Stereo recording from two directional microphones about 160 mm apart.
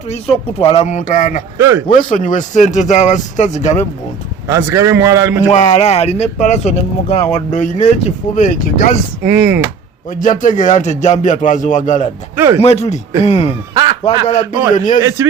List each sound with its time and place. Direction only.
0.1 s speech: 40° left (ahead or behind)
1.5 s a man's voice: 15° right (ahead or behind)
1.9 s speech: 55° left (ahead or behind)
4.4 s a man's voice: 15° right (ahead or behind)
5.5 s speech: 45° left (ahead or behind)
7.6 s speech: 50° left (ahead or behind)
9.2 s a man's voice: 10° right (ahead or behind)
10.1 s speech: 55° left (ahead or behind); by 14.2 s 40° left (ahead or behind)
14.7 s speech: 55° left (ahead or behind)